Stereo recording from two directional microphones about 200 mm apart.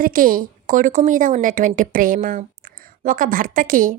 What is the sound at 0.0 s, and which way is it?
A woman's voice, 45° right (ahead or behind).